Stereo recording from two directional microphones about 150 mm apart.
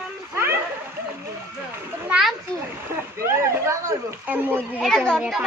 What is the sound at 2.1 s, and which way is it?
Children playing, 5° right (ahead or behind).